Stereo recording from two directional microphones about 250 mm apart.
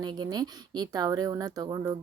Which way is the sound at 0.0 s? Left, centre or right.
Centre.